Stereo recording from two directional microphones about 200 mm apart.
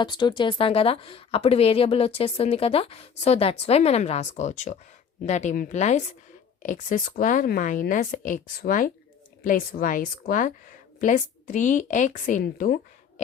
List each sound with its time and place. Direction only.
0.0 s a woman's voice: 20° left (ahead or behind); by 13.2 s 40° left (ahead or behind)